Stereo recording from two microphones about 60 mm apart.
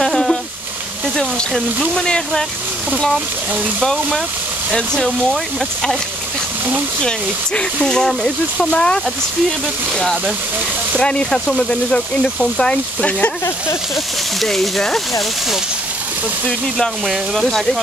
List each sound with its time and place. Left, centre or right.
0.0 s a sound: centre
2.0 s speech: centre
3.8 s speech: centre
7.0 s speech: centre
11.0 s speech: centre
14.4 s speech: centre
16.4 s speech: centre